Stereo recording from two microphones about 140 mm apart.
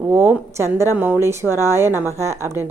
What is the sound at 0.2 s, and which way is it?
A woman's voice, 20° right (ahead or behind).